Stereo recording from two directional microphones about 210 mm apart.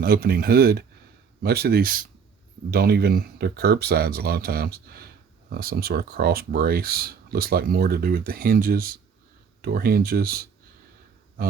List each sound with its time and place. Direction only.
0.0 s speech: 45° right (ahead or behind)